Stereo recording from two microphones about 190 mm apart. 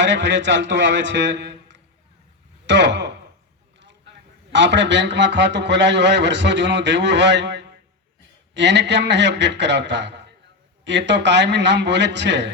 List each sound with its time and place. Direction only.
0.0 s a man's voice: 70° right (ahead or behind)
4.1 s a sound: 65° right (ahead or behind)
4.5 s a man's voice: 70° right (ahead or behind)